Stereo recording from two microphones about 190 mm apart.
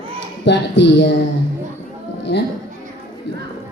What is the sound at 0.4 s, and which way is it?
Speech, 65° left (ahead or behind).